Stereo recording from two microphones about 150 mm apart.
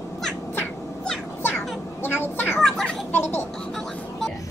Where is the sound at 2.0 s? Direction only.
15° left (ahead or behind).